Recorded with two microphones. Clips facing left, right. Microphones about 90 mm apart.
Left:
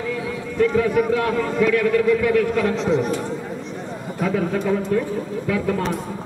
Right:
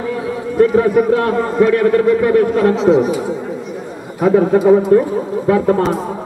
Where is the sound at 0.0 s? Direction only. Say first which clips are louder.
Right 6 dB; 40° right (ahead or behind).